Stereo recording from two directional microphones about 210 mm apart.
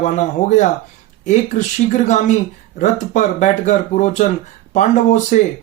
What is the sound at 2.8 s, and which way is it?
Speech, 35° left (ahead or behind).